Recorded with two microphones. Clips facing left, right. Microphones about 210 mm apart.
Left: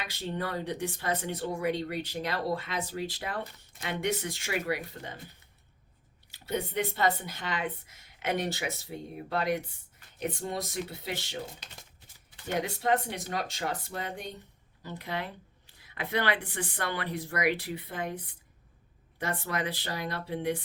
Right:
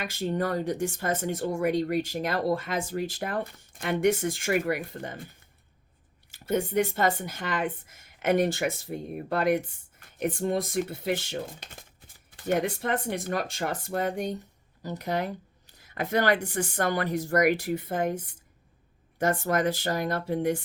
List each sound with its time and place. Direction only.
0.0 s speech: 45° right (ahead or behind)
6.3 s speech: 50° right (ahead or behind)